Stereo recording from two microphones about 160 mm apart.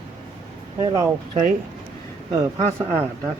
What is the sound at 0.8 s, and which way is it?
Speech, 25° right (ahead or behind).